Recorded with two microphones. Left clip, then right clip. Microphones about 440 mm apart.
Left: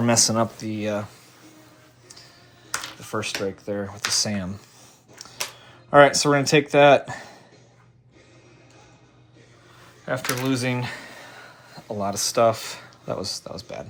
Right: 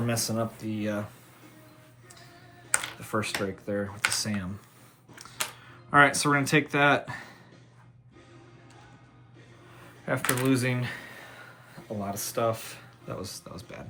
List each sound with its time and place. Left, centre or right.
0.1 s speech: centre
3.0 s speech: centre
5.1 s a sound: centre
5.9 s speech: centre
10.1 s speech: centre